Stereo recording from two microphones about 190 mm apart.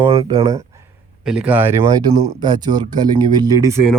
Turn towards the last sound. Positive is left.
turn(degrees=-15)  # may be behind; listen again after turning